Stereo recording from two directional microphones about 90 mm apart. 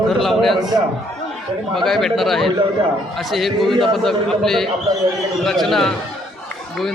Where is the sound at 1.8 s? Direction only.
Centre (ahead or behind).